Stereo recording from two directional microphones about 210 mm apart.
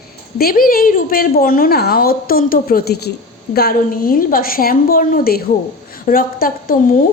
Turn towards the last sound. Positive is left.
turn(degrees=40)  # may be behind; listen again after turning